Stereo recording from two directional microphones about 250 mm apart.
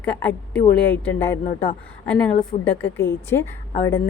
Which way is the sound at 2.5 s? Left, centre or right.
Left.